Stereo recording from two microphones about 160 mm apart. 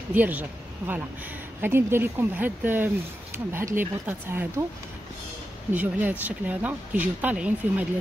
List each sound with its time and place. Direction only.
0.1 s speech: 10° right (ahead or behind)
5.7 s speech: 10° right (ahead or behind)